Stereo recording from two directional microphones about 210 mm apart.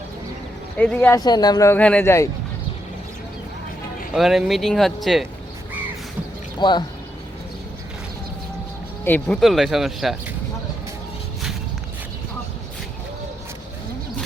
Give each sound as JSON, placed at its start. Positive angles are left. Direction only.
{"t": 0.8, "sound": "speech", "side_deg": 10}
{"t": 4.1, "sound": "speech", "side_deg": 0}
{"t": 6.6, "sound": "speech", "side_deg": 20}
{"t": 9.0, "sound": "speech", "side_deg": 5}